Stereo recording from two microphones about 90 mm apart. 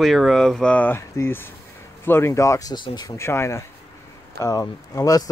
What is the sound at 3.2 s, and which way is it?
Speech, 30° left (ahead or behind).